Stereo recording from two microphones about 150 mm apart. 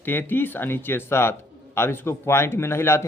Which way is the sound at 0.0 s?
15° left (ahead or behind).